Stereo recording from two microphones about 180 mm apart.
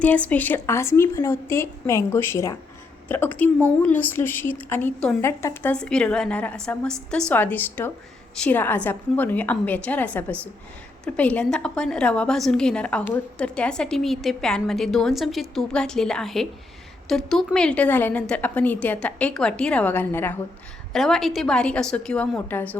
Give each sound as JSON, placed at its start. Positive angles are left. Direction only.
{"t": 0.0, "sound": "a woman's voice", "side_deg": 10}
{"t": 5.7, "sound": "a woman's voice", "side_deg": 5}